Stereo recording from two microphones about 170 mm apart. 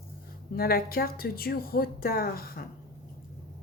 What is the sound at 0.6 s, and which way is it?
A woman's voice, 65° left (ahead or behind).